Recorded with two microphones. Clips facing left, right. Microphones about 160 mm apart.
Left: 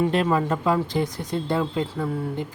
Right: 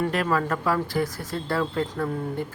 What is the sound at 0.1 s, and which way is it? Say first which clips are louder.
Speech: left 3 dB; 25° left (ahead or behind).